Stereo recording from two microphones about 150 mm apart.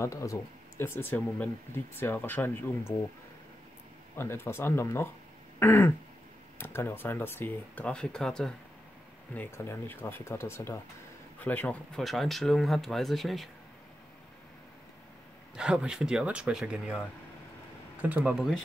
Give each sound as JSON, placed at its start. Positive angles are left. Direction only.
{"t": 0.0, "sound": "speech", "side_deg": 20}
{"t": 4.2, "sound": "speech", "side_deg": 15}
{"t": 15.5, "sound": "speech", "side_deg": -5}
{"t": 18.0, "sound": "speech", "side_deg": -10}